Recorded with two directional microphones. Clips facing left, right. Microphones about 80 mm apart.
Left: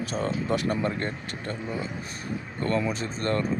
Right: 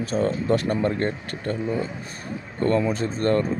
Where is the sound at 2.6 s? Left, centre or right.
Right.